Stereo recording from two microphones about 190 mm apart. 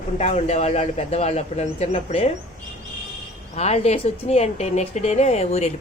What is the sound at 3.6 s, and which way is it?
Speech, 35° left (ahead or behind).